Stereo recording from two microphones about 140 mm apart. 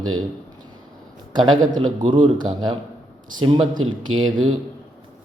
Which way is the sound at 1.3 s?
30° right (ahead or behind).